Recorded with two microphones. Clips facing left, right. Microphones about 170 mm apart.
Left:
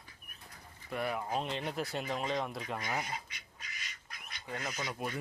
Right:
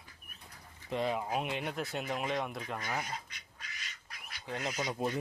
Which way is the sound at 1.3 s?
10° right (ahead or behind).